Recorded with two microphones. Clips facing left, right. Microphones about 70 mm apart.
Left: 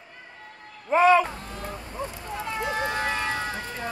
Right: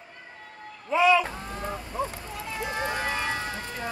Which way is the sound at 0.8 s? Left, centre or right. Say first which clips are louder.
Left 3 dB; left.